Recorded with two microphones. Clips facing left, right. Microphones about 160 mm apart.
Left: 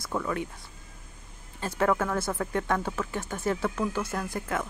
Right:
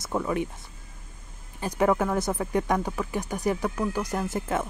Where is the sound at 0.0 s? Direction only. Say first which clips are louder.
Right 3 dB; 20° right (ahead or behind).